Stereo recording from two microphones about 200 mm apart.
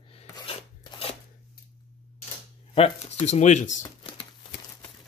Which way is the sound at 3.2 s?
35° left (ahead or behind).